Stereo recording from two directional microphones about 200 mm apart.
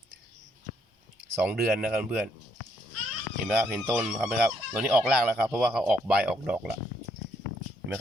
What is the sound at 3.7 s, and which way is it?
Speech, centre (ahead or behind).